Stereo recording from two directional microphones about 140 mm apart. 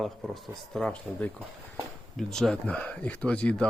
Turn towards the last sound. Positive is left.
turn(degrees=10)  # may be behind; listen again after turning